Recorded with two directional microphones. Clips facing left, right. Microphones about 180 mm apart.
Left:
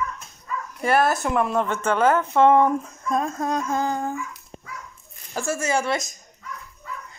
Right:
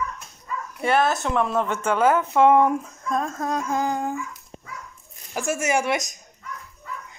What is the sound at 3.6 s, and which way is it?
Speech, 15° right (ahead or behind).